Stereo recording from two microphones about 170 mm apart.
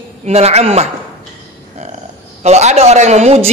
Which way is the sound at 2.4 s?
40° right (ahead or behind).